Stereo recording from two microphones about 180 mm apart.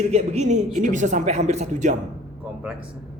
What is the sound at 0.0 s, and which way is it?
A man's voice, 35° right (ahead or behind).